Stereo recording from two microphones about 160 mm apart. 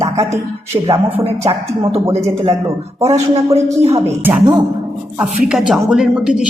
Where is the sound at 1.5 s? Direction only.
35° right (ahead or behind).